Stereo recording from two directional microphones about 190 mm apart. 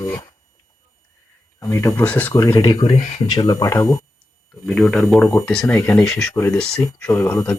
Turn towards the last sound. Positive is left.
turn(degrees=15)  # may be behind; listen again after turning